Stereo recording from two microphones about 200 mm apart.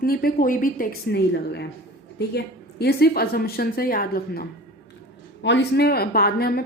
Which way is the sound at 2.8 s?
50° left (ahead or behind).